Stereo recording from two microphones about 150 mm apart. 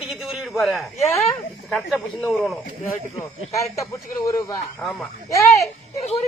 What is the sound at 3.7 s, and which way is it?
Speech, 20° left (ahead or behind).